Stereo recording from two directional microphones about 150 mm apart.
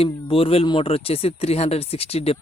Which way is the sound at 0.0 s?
40° left (ahead or behind).